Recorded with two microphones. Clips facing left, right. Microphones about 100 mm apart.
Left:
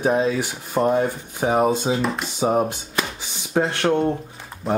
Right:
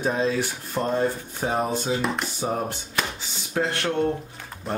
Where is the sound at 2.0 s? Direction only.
Centre (ahead or behind).